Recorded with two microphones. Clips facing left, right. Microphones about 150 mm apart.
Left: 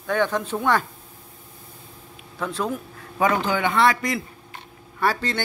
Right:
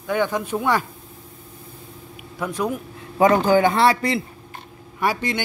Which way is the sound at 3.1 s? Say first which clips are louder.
Right 6 dB; 40° right (ahead or behind).